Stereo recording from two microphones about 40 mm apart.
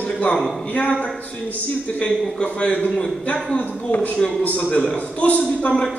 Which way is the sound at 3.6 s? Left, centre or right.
Left.